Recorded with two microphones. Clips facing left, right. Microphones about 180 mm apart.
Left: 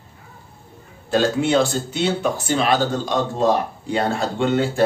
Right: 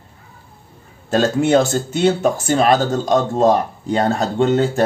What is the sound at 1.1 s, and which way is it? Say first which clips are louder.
Speech: right 3 dB; 45° right (ahead or behind).